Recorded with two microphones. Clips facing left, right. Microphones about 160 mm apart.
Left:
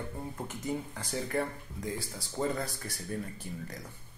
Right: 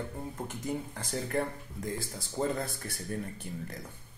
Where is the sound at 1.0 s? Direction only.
45° right (ahead or behind).